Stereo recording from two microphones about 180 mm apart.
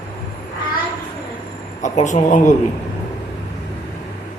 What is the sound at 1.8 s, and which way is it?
Speech, 40° left (ahead or behind).